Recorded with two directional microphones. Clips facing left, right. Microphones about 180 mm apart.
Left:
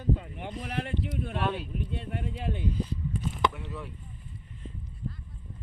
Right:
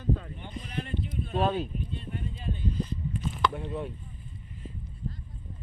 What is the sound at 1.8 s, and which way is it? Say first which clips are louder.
Speech: left 2 dB; 80° left.